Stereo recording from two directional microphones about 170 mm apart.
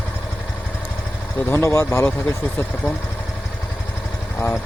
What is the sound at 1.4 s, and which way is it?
Speech, 15° left (ahead or behind).